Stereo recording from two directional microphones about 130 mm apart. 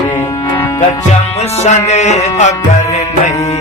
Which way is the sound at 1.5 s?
60° left (ahead or behind).